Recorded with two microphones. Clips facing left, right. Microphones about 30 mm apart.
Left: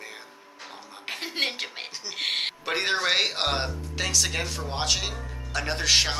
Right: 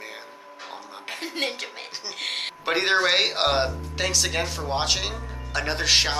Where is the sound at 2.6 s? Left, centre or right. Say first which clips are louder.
Right 6 dB; centre.